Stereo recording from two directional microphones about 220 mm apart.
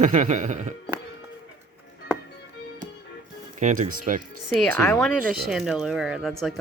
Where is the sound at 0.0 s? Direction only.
35° right (ahead or behind).